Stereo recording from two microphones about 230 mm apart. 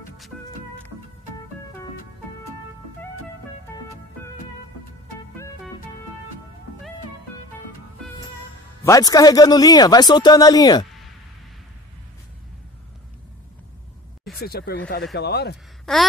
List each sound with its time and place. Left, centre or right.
3.7 s music: centre
8.8 s speech: centre
14.4 s speech: left
15.8 s a sound: centre